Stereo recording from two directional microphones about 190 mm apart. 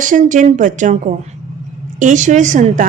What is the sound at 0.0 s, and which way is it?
A woman's voice, 45° right (ahead or behind).